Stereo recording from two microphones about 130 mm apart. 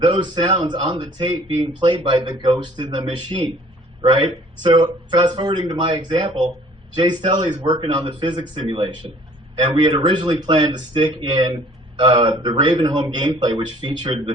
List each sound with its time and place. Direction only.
0.0 s speech: 35° right (ahead or behind)